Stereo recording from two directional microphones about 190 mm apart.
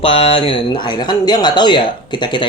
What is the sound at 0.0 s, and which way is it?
Speech, 30° left (ahead or behind).